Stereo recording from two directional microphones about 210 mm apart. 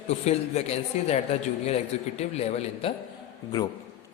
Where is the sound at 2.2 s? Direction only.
30° left (ahead or behind).